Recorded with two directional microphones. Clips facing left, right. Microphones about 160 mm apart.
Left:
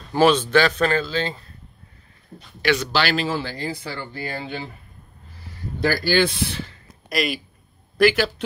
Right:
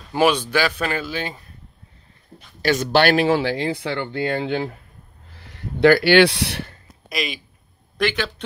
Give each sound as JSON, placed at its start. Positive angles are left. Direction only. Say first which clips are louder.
{"t": 0.1, "sound": "speech", "louder": "left 2 dB", "side_deg": -15}
{"t": 2.6, "sound": "speech", "louder": "right 4 dB", "side_deg": -45}
{"t": 7.1, "sound": "speech", "louder": "left 3 dB", "side_deg": 0}